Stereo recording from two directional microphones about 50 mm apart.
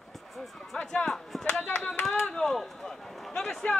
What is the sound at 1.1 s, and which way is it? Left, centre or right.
Speech, centre.